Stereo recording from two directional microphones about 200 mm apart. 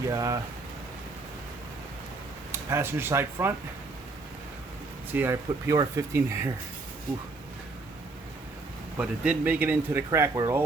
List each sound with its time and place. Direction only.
0.1 s speech: 15° right (ahead or behind)
2.5 s speech: 10° right (ahead or behind)
5.1 s speech: 10° right (ahead or behind)
9.0 s speech: 5° right (ahead or behind)